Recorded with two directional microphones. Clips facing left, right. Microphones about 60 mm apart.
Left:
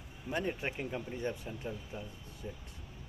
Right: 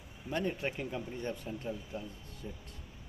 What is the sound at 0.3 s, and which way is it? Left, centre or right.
Speech, centre.